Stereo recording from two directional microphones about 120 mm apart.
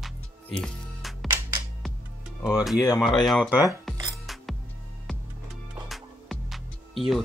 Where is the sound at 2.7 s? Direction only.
30° left (ahead or behind).